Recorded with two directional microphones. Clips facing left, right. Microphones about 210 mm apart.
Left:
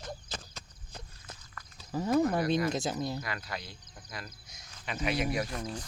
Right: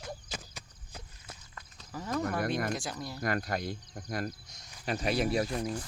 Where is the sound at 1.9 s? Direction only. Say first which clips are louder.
Left 6 dB; 25° left (ahead or behind).